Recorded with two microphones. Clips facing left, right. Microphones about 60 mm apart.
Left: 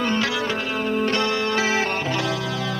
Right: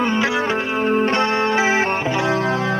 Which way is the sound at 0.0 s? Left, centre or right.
Right.